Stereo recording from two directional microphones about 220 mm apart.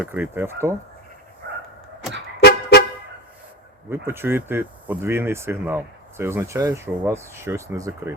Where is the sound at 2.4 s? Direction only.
45° left (ahead or behind).